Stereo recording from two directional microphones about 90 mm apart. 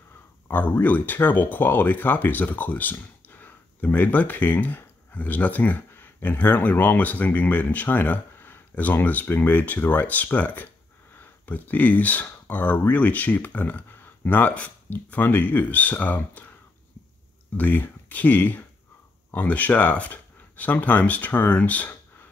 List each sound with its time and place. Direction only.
0.5 s speech: 20° left (ahead or behind)
17.6 s speech: 20° left (ahead or behind)